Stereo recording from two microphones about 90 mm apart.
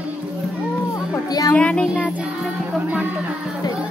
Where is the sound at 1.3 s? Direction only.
45° left (ahead or behind).